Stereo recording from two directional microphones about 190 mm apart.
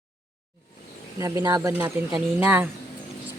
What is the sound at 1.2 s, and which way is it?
Speech, 20° right (ahead or behind).